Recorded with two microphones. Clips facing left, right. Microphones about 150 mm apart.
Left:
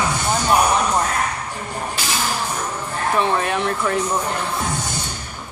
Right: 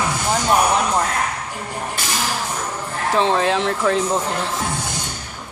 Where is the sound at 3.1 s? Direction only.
90° right.